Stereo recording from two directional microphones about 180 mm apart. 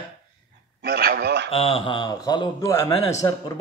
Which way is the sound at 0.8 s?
60° right (ahead or behind).